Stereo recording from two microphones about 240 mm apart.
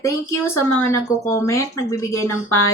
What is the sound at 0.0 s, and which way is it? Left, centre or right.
Speech, centre.